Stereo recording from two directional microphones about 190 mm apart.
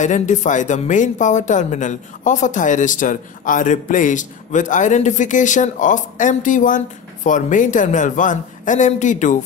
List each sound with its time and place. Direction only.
0.0 s speech: 40° left (ahead or behind)